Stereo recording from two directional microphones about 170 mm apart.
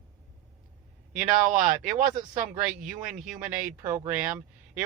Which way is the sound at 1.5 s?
50° right (ahead or behind).